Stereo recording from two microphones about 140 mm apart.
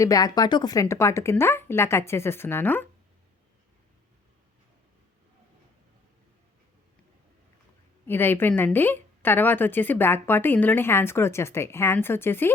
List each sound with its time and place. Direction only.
0.0 s speech: 25° left (ahead or behind)
8.0 s a woman's voice: 15° left (ahead or behind)